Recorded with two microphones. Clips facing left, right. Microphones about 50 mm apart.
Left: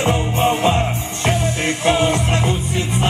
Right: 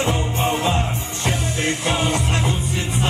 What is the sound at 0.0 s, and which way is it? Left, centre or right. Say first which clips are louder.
Music: left 4 dB; left.